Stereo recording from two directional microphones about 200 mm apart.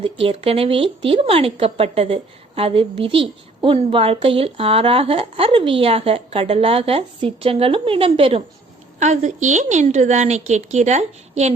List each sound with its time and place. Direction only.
0.0 s a woman's voice: 25° right (ahead or behind)